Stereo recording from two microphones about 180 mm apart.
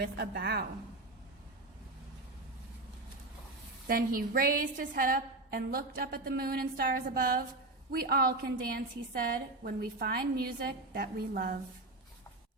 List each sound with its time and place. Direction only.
0.0 s a woman's voice: 60° right (ahead or behind)
3.8 s a woman's voice: 55° right (ahead or behind)